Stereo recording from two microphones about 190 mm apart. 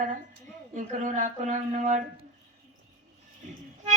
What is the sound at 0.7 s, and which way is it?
Speech, 40° right (ahead or behind).